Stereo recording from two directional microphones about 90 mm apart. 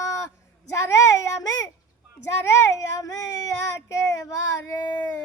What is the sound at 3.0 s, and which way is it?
Child singing, 40° left (ahead or behind).